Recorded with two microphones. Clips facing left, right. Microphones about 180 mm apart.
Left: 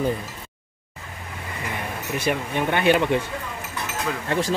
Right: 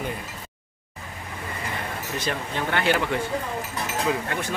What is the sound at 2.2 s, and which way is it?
Speech, 20° left (ahead or behind).